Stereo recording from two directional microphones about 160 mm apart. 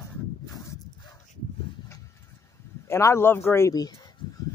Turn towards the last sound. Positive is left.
turn(degrees=25)  # may be behind; listen again after turning